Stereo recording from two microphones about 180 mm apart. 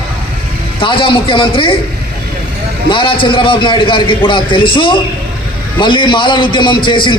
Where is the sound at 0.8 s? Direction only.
30° left (ahead or behind).